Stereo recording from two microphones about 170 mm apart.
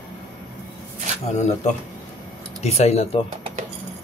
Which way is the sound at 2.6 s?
40° left (ahead or behind).